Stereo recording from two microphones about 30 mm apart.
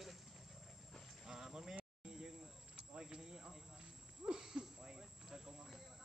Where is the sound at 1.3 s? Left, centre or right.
Centre.